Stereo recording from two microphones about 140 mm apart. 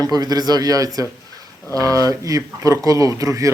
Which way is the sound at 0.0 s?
25° right (ahead or behind).